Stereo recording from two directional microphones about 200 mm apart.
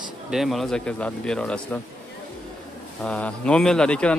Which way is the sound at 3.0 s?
5° left (ahead or behind).